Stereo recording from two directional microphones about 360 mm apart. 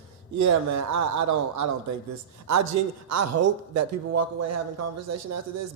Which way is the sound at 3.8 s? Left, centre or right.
Right.